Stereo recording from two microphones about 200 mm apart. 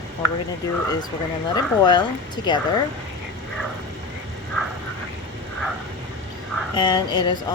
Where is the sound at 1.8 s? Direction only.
20° left (ahead or behind).